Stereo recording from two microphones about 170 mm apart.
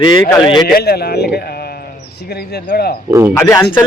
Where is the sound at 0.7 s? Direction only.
65° left (ahead or behind).